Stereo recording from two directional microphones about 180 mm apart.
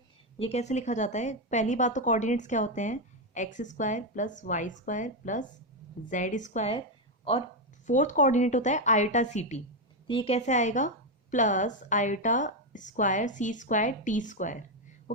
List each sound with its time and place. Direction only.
0.3 s a woman's voice: 35° left (ahead or behind)
7.9 s a woman's voice: 45° left (ahead or behind)